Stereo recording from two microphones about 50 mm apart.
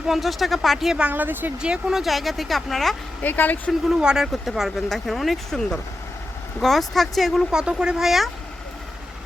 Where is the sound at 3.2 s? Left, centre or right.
Left.